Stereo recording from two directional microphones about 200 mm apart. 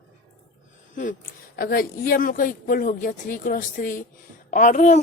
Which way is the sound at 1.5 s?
50° left (ahead or behind).